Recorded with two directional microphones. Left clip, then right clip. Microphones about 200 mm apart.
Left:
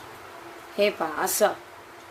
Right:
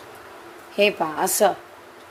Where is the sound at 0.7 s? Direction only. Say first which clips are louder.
Right 4 dB; 20° right (ahead or behind).